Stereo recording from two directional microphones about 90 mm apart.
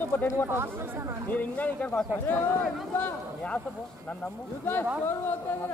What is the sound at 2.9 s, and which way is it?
Speech, 20° left (ahead or behind).